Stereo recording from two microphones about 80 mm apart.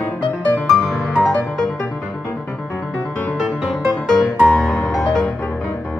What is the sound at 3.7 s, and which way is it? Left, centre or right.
Music, centre.